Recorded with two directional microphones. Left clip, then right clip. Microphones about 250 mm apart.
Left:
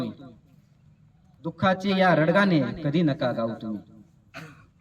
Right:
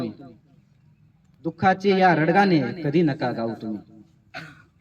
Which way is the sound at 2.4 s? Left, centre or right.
Centre.